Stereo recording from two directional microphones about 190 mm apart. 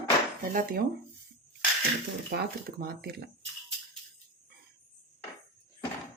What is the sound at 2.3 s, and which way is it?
Speech, 55° right (ahead or behind).